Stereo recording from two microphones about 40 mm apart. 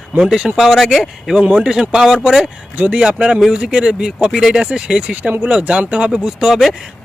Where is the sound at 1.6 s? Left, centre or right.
Centre.